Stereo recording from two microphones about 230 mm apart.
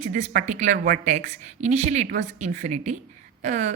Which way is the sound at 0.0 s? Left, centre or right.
Right.